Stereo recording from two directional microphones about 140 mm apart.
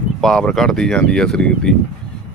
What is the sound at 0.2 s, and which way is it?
Speech, 5° left (ahead or behind).